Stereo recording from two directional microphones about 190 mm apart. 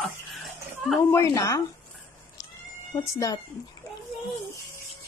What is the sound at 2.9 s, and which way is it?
Speech, 20° left (ahead or behind).